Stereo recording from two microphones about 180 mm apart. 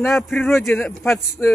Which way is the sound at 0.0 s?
Centre (ahead or behind).